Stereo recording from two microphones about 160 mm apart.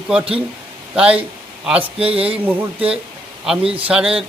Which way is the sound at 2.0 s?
35° right (ahead or behind).